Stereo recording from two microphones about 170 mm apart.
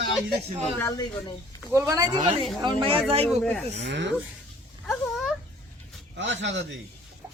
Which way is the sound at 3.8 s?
90° right.